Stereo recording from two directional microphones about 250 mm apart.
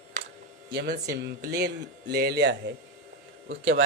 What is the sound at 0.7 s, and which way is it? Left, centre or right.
Speech, right.